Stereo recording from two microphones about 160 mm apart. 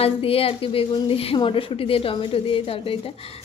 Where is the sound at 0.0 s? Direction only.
35° left (ahead or behind).